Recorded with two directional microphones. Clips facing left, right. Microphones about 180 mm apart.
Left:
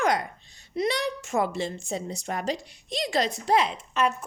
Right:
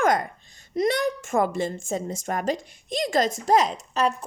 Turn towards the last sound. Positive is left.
turn(degrees=-40)  # may be behind; listen again after turning